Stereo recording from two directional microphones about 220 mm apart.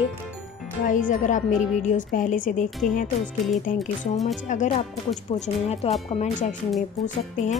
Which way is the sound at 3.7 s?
35° left (ahead or behind).